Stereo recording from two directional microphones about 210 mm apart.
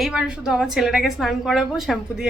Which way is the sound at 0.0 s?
5° right (ahead or behind).